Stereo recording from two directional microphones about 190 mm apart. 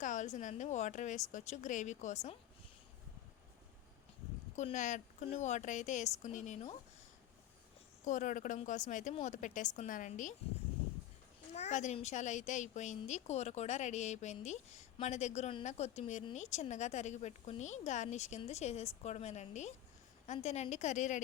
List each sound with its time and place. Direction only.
0.0 s a woman's voice: 40° left (ahead or behind)
4.5 s a woman's voice: 40° left (ahead or behind)
8.0 s a woman's voice: 40° left (ahead or behind)
11.5 s a woman's voice: 35° left (ahead or behind)